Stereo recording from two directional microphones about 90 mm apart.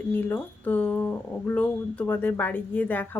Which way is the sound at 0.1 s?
20° left (ahead or behind).